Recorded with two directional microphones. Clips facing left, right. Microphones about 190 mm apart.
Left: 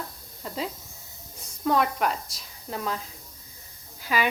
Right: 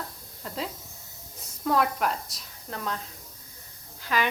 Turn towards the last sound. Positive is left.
turn(degrees=10)  # may be behind; listen again after turning